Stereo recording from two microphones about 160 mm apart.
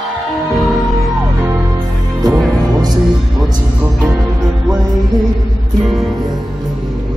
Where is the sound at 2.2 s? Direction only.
25° right (ahead or behind).